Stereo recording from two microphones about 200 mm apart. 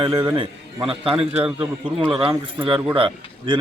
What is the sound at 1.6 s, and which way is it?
Speech, 10° right (ahead or behind).